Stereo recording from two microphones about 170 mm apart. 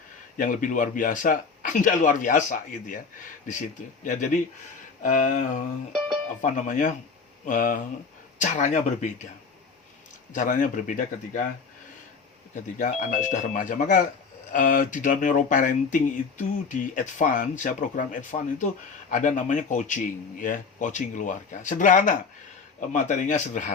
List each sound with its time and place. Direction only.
0.3 s speech: 50° left (ahead or behind)
10.3 s speech: 50° left (ahead or behind)
12.8 s speech: 50° left (ahead or behind)